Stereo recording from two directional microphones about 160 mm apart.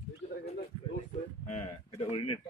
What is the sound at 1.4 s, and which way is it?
Speech, 45° left (ahead or behind).